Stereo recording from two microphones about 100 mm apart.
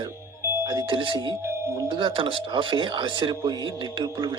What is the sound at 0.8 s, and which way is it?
A man's voice, 60° right (ahead or behind).